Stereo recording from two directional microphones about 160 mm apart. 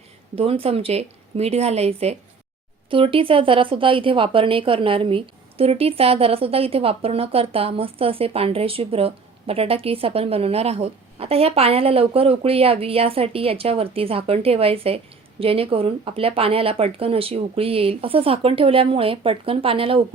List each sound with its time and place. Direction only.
0.3 s speech: 35° right (ahead or behind)